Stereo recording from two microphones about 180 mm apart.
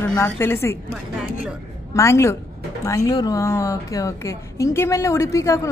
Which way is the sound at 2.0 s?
15° left (ahead or behind).